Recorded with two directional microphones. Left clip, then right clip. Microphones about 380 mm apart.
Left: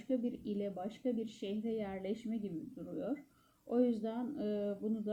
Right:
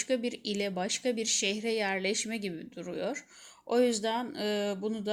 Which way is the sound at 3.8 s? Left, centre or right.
Right.